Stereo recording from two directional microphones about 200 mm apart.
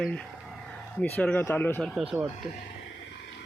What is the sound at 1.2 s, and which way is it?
Speech, 10° left (ahead or behind).